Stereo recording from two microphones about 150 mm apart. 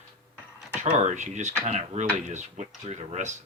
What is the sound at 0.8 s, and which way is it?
Speech, 50° right (ahead or behind).